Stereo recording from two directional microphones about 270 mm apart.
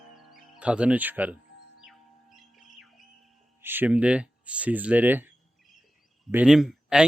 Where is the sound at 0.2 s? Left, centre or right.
Centre.